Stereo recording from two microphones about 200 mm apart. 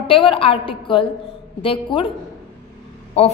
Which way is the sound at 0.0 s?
25° left (ahead or behind).